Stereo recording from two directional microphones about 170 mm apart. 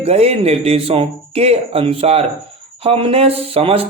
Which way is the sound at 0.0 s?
35° right (ahead or behind).